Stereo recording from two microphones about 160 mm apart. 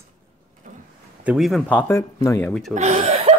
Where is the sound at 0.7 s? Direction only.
55° right (ahead or behind).